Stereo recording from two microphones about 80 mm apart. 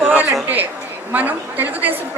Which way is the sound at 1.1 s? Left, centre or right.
Right.